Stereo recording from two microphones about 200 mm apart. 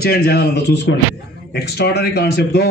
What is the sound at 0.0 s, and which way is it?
A man's voice, 50° left (ahead or behind).